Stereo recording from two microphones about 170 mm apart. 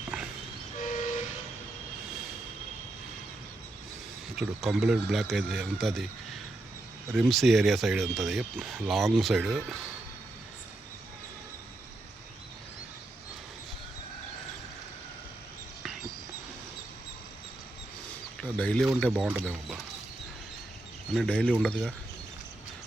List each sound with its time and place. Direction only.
0.1 s vehicle: 5° right (ahead or behind)
0.8 s train: 45° left (ahead or behind)
4.4 s speech: centre (ahead or behind)
18.3 s speech: 5° left (ahead or behind)
21.1 s speech: 5° left (ahead or behind)